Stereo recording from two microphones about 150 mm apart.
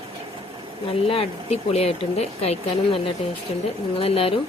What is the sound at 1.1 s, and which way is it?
Speech, 40° left (ahead or behind).